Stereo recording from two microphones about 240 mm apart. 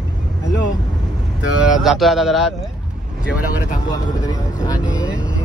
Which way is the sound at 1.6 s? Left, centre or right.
Centre.